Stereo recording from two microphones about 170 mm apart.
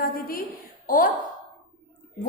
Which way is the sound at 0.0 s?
60° left (ahead or behind).